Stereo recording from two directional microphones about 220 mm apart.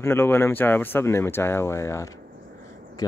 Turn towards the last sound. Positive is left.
turn(degrees=15)  # may be behind; listen again after turning